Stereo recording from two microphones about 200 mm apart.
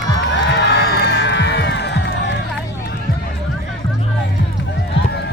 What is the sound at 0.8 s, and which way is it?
Music, 60° left (ahead or behind).